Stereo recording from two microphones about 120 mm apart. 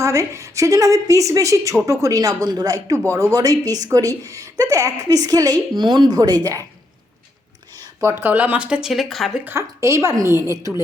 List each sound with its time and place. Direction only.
0.0 s a woman's voice: 25° right (ahead or behind)
8.0 s speech: 15° right (ahead or behind); by 9.3 s centre (ahead or behind)
9.4 s a woman's voice: 20° right (ahead or behind)